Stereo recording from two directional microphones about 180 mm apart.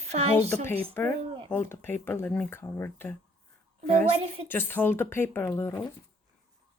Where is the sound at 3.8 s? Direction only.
30° right (ahead or behind).